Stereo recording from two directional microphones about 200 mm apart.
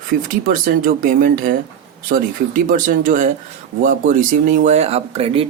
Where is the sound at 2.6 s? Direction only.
40° right (ahead or behind).